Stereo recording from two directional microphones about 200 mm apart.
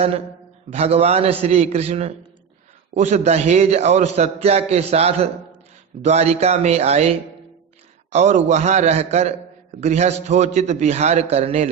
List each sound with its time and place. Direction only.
0.7 s a man's voice: 30° right (ahead or behind)